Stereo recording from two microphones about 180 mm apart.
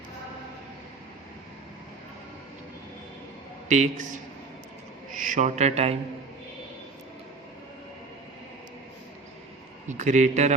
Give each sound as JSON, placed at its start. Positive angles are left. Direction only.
{"t": 3.7, "sound": "a man's voice", "side_deg": -45}
{"t": 9.9, "sound": "speech", "side_deg": -40}